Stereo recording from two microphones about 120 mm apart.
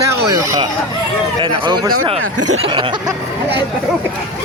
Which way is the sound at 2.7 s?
40° right (ahead or behind).